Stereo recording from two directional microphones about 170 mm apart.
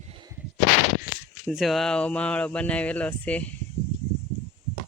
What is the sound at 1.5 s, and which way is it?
Speech, centre (ahead or behind).